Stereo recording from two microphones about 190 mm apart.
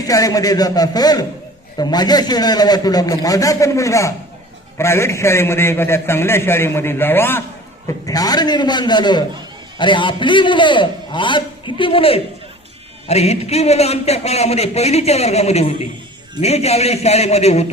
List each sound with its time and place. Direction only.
0.1 s a man's voice: 20° left (ahead or behind); by 17.7 s 35° left (ahead or behind)